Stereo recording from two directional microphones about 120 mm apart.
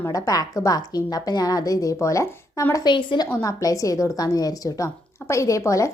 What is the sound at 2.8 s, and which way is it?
Speech, 40° left (ahead or behind).